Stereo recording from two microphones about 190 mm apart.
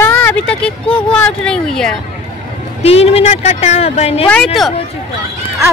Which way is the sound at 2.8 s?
30° left (ahead or behind).